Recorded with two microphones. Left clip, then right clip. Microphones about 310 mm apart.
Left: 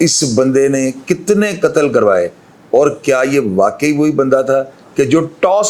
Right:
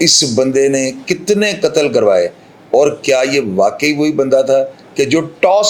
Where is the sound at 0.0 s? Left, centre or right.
Left.